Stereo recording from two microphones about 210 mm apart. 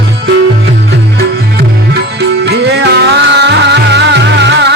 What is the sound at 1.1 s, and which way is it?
Music, 50° right (ahead or behind).